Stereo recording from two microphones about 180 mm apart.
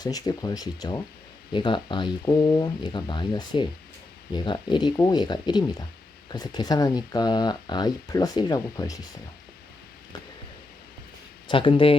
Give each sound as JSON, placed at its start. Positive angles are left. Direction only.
{"t": 0.0, "sound": "speech", "side_deg": 20}
{"t": 11.4, "sound": "speech", "side_deg": 30}